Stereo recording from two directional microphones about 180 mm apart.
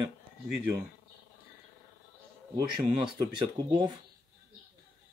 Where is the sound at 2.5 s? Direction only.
20° right (ahead or behind).